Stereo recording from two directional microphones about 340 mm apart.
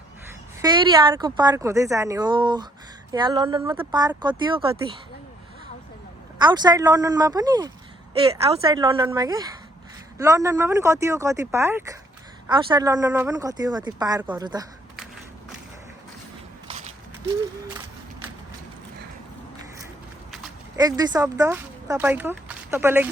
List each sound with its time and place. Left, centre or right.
0.6 s speech: centre
6.4 s speech: centre
16.6 s biting: centre
20.7 s speech: centre